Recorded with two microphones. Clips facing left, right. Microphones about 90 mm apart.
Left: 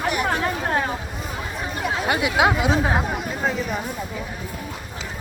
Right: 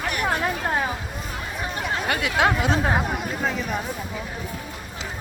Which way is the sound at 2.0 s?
10° left (ahead or behind).